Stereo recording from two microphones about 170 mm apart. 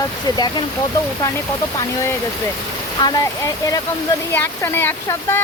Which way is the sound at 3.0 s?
20° left (ahead or behind).